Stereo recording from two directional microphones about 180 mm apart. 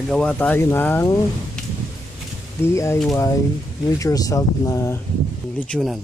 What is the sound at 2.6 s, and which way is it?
Speech, 15° left (ahead or behind).